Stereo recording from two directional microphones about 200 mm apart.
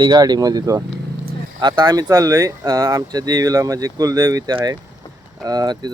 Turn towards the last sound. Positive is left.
turn(degrees=-20)  # may be behind; listen again after turning